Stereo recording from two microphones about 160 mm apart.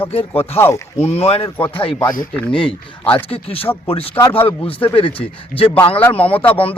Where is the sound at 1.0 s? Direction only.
40° left (ahead or behind).